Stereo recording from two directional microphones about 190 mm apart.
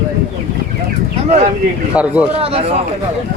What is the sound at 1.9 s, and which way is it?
Speech, 5° right (ahead or behind).